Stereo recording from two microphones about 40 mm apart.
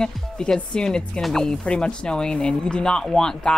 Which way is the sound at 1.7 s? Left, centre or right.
Left.